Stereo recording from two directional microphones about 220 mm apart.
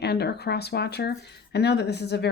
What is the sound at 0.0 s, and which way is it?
Speech, 50° left (ahead or behind).